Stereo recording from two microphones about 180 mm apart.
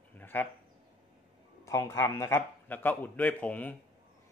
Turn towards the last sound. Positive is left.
turn(degrees=10)  # may be behind; listen again after turning